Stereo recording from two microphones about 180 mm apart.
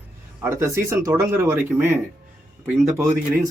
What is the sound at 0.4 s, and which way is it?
Speech, 15° right (ahead or behind).